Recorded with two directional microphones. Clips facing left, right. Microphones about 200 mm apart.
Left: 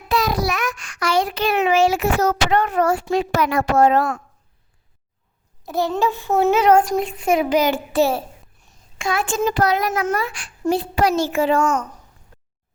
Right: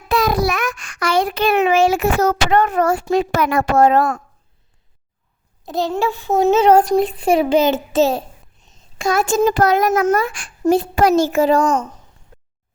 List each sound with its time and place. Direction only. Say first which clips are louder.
0.1 s a child's voice: right 3 dB; 55° right (ahead or behind)
5.6 s a child's voice: right 1 dB; 15° right (ahead or behind)
9.0 s a child's voice: right 5 dB; 40° right (ahead or behind)